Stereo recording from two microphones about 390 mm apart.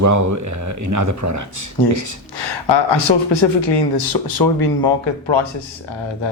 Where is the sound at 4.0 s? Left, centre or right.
Left.